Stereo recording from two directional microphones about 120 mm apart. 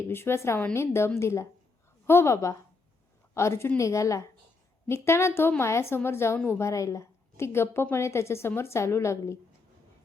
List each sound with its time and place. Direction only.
0.1 s a woman's voice: 20° left (ahead or behind)